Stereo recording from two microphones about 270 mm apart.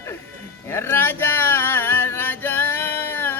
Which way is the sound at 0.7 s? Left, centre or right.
Centre.